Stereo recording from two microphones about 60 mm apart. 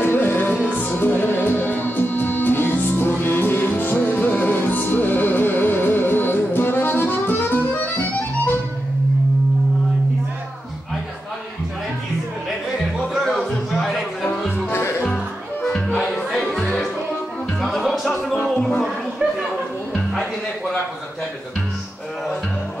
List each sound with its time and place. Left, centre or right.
0.0 s music: left
13.1 s music: centre
13.5 s a sound: centre
14.7 s music: left
16.0 s music: centre
19.9 s music: centre